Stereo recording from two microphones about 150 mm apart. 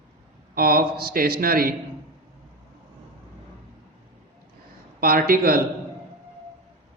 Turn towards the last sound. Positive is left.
turn(degrees=-80)